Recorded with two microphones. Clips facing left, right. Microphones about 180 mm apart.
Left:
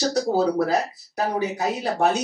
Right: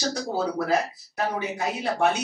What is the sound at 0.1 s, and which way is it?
Speech, 40° left (ahead or behind).